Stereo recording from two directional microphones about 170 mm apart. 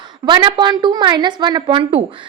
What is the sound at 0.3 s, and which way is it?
A woman's voice, 30° right (ahead or behind).